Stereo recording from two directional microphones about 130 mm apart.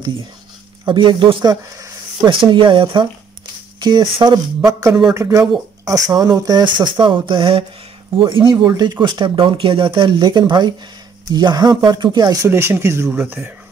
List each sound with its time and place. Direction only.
0.8 s speech: 40° right (ahead or behind)
5.1 s speech: 20° right (ahead or behind)
12.4 s speech: 20° right (ahead or behind)